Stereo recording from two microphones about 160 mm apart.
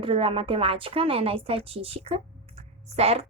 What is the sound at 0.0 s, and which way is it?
Speech, 35° right (ahead or behind).